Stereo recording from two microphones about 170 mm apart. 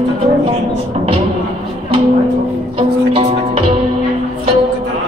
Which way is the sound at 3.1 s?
35° right (ahead or behind).